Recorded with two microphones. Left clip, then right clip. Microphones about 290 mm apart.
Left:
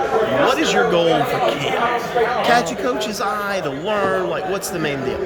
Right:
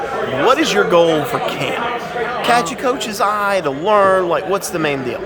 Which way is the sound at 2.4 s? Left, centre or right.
Centre.